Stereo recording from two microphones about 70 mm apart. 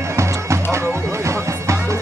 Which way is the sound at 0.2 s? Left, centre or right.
Right.